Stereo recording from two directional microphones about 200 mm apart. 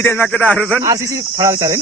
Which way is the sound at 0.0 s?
10° left (ahead or behind).